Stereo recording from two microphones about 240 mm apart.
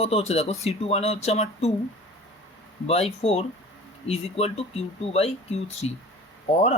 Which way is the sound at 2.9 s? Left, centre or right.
Left.